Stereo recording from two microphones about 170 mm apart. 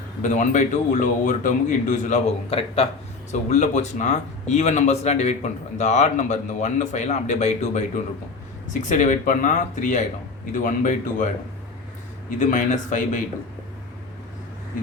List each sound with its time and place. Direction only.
0.2 s speech: 45° left (ahead or behind)
12.4 s speech: 45° left (ahead or behind)